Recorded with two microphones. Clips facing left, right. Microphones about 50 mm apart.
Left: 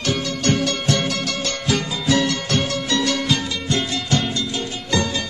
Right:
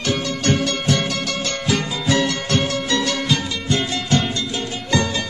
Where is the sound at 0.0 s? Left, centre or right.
Centre.